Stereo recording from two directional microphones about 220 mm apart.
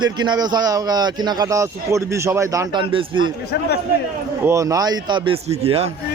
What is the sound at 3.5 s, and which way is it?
Speech, 45° left (ahead or behind).